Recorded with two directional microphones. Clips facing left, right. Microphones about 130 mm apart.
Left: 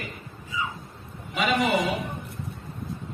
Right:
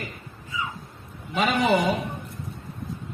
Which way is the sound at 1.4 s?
40° right (ahead or behind).